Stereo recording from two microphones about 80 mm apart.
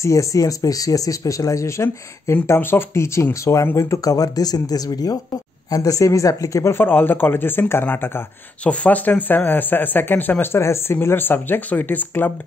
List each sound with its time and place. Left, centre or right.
0.0 s speech: left
6.8 s speech: left